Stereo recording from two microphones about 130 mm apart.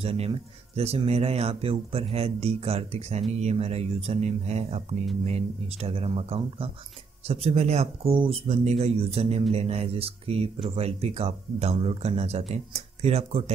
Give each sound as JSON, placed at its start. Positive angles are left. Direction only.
{"t": 0.0, "sound": "speech", "side_deg": -50}